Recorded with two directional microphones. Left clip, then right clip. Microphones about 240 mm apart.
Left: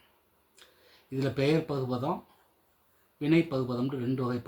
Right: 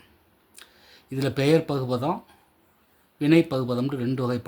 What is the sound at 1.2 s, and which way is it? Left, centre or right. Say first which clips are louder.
Speech: right 6 dB; right.